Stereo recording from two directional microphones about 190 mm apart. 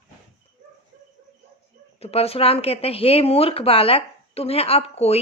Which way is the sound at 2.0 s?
30° left (ahead or behind).